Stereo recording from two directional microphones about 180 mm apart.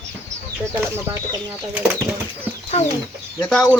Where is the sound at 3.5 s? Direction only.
5° left (ahead or behind).